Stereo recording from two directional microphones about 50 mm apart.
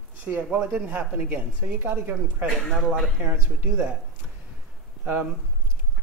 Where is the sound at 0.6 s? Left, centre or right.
Right.